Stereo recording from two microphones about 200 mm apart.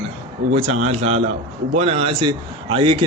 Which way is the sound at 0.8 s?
30° right (ahead or behind).